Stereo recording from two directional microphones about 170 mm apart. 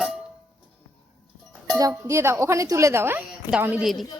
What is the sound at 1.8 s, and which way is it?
A woman's voice, 20° right (ahead or behind).